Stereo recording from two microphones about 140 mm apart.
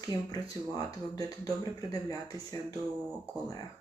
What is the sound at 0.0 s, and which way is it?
Speech, 25° left (ahead or behind).